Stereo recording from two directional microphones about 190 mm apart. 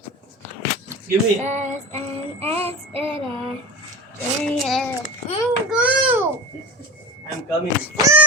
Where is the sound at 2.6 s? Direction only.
30° right (ahead or behind).